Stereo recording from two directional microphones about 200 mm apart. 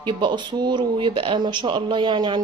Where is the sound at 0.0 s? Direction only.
25° right (ahead or behind).